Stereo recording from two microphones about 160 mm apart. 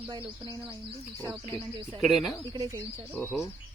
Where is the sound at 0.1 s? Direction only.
30° right (ahead or behind).